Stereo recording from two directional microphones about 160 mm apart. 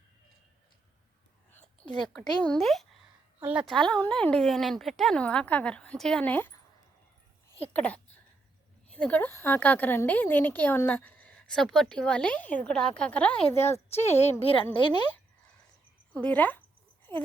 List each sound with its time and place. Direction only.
2.4 s speech: 5° left (ahead or behind)
7.7 s a woman's voice: 10° left (ahead or behind)
13.9 s a woman's voice: 40° left (ahead or behind)
14.8 s speech: 30° left (ahead or behind)
16.1 s a woman's voice: 10° left (ahead or behind)